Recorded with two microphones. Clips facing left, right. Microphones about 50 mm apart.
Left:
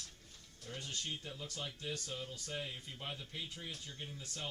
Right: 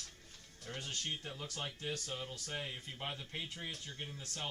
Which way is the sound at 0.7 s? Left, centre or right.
Right.